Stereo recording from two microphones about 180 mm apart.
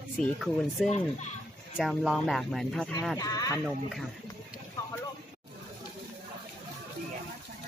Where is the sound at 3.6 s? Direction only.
Centre (ahead or behind).